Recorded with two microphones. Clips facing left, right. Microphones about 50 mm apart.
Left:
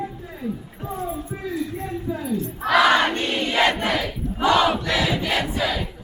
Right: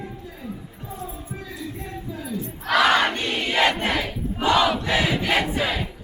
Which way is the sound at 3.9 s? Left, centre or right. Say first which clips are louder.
Left 1 dB; centre.